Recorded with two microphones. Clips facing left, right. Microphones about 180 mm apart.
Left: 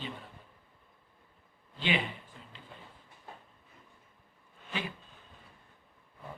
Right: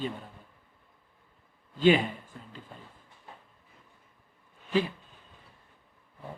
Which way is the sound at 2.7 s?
45° right (ahead or behind).